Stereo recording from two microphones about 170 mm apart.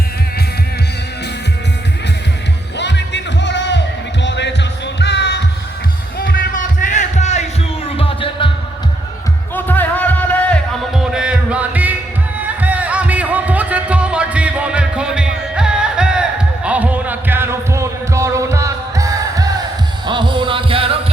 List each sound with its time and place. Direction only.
2.7 s music: 90° left
6.1 s music: 55° left (ahead or behind); by 8.4 s 30° left (ahead or behind)
9.6 s music: 10° left (ahead or behind)
10.9 s music: 5° right (ahead or behind)
16.6 s heart sounds: 10° right (ahead or behind)
20.1 s music: 25° right (ahead or behind)